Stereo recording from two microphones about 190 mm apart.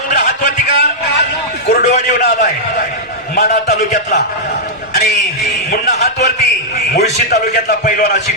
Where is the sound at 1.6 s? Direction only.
60° left (ahead or behind).